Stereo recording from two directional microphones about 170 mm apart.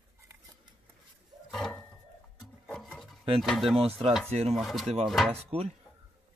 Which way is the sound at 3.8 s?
35° right (ahead or behind).